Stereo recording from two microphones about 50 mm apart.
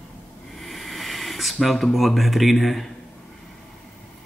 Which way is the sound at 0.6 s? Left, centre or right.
Centre.